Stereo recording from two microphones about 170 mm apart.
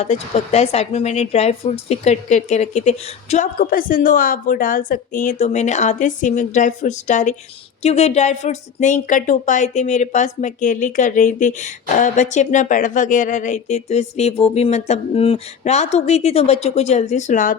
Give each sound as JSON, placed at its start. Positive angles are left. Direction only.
{"t": 0.0, "sound": "a woman's voice", "side_deg": 40}